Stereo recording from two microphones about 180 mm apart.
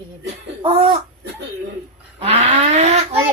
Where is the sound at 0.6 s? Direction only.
30° right (ahead or behind).